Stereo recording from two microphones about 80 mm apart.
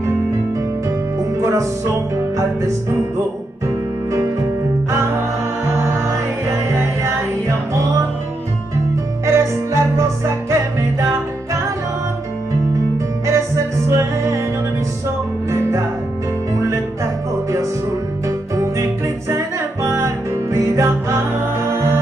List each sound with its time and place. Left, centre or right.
0.8 s music: right
5.7 s music: right
9.2 s music: right
13.3 s music: right